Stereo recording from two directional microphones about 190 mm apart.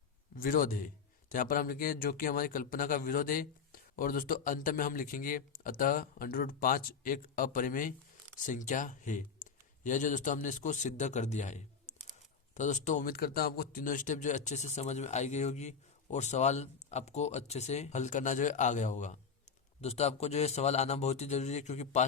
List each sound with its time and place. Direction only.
0.3 s a man's voice: 50° left (ahead or behind)